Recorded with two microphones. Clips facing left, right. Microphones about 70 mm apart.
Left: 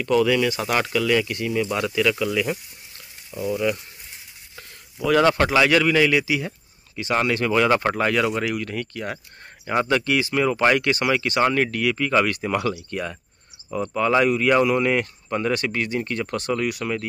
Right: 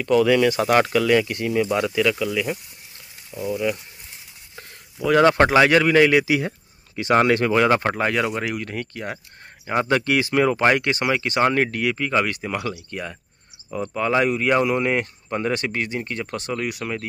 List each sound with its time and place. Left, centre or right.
0.0 s speech: right
2.1 s speech: centre
5.0 s speech: right
6.2 s speech: right
7.2 s speech: right
7.7 s speech: centre
9.8 s speech: right
10.6 s speech: right
12.4 s speech: centre